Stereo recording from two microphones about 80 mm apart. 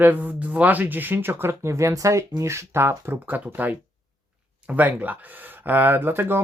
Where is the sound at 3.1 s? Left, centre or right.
Right.